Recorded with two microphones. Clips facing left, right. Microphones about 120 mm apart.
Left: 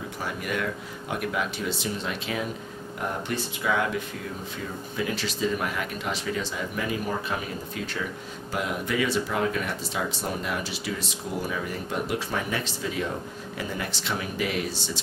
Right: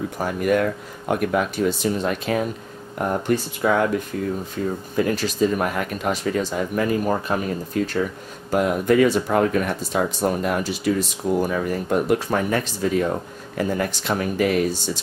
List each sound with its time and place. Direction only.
0.2 s speech: 50° right (ahead or behind)
4.9 s speech: 45° right (ahead or behind)